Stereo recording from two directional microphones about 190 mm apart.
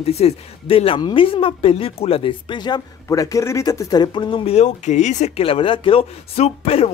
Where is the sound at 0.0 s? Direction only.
30° left (ahead or behind).